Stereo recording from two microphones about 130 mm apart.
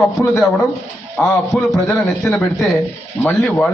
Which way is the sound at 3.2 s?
15° left (ahead or behind).